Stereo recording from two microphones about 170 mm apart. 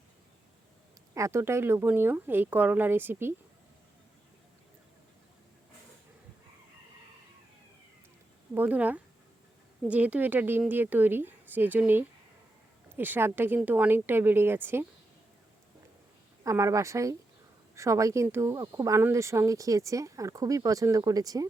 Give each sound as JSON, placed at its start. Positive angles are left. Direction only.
{"t": 1.1, "sound": "speech", "side_deg": -15}
{"t": 8.5, "sound": "speech", "side_deg": -10}
{"t": 16.4, "sound": "speech", "side_deg": -20}